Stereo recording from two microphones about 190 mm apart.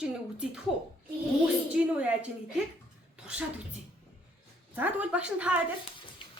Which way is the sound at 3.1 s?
5° right (ahead or behind).